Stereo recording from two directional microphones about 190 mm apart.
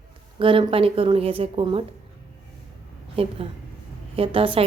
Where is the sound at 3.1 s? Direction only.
30° right (ahead or behind).